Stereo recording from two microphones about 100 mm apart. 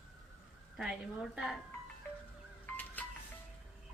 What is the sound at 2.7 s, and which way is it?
Music, 20° left (ahead or behind).